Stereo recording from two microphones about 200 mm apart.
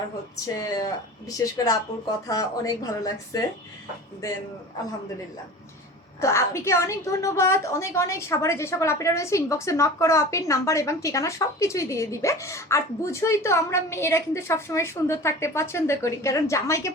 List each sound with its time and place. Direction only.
0.3 s a woman's voice: 15° left (ahead or behind)
6.1 s a woman's voice: 15° left (ahead or behind)